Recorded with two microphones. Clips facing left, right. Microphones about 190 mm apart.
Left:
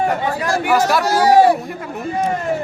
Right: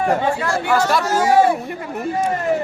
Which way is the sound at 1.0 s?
40° left (ahead or behind).